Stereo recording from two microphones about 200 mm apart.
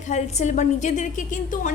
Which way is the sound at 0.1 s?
35° left (ahead or behind).